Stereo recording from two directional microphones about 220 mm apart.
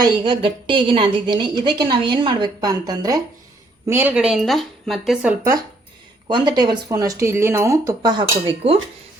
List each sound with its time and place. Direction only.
0.0 s a woman's voice: 20° right (ahead or behind)
6.2 s speech: 20° right (ahead or behind)